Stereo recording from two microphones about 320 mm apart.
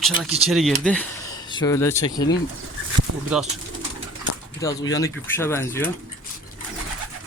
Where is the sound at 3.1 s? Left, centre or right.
Right.